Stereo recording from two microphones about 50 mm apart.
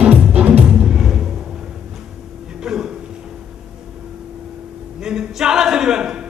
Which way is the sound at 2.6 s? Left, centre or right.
Centre.